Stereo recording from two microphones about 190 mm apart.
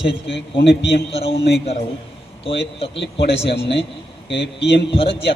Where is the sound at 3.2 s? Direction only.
30° left (ahead or behind).